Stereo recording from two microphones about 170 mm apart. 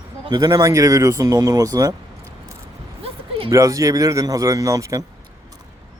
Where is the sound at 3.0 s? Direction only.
35° right (ahead or behind).